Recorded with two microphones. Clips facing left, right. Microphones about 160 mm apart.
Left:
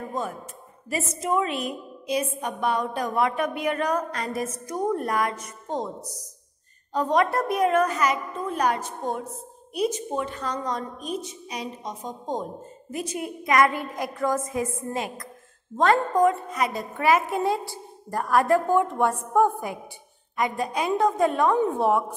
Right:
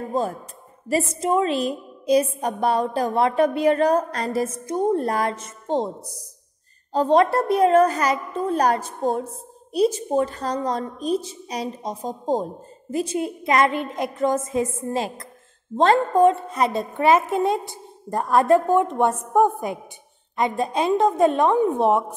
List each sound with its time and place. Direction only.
0.1 s a woman's voice: 30° right (ahead or behind)